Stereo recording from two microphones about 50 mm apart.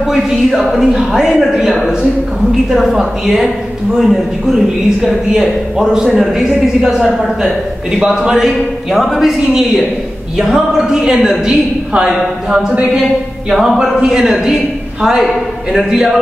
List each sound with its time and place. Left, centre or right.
0.0 s a man's voice: centre
8.0 s a man's voice: centre
8.5 s a man's voice: centre
9.4 s a man's voice: centre